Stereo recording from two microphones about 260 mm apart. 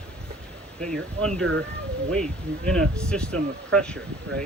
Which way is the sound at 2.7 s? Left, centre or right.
Centre.